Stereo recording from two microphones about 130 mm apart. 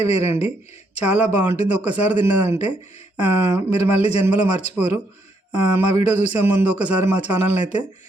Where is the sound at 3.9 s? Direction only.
55° left (ahead or behind).